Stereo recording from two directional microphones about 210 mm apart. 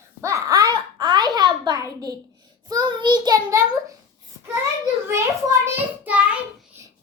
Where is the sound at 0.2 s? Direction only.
15° right (ahead or behind).